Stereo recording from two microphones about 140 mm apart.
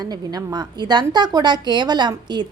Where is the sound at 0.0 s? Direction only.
30° right (ahead or behind).